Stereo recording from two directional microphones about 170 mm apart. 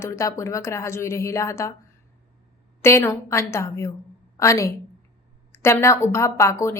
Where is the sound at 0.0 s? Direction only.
15° left (ahead or behind).